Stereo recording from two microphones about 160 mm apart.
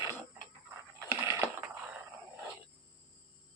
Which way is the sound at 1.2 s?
15° right (ahead or behind).